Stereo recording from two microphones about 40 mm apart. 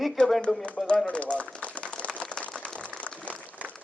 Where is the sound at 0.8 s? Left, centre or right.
Left.